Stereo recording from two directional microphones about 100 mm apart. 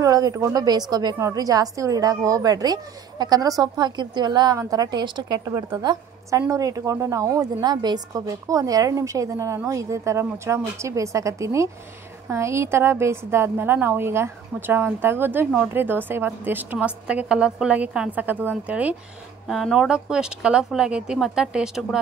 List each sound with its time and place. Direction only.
0.0 s a woman's voice: 35° right (ahead or behind); by 18.9 s 15° right (ahead or behind)
19.4 s speech: centre (ahead or behind)